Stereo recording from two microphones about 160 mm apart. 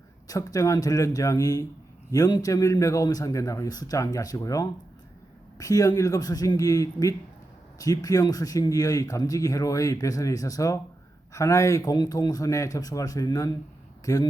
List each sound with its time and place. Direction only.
0.3 s speech: 20° left (ahead or behind)